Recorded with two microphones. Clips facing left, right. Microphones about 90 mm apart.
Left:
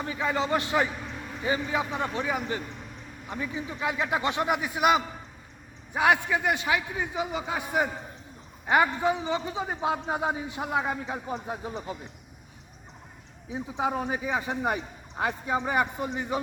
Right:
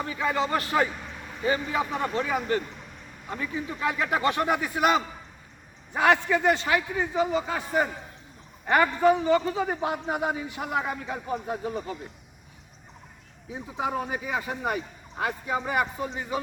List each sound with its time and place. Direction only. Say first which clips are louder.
0.1 s a man's voice: even; 25° left (ahead or behind)
13.5 s a man's voice: left 1 dB; 20° left (ahead or behind)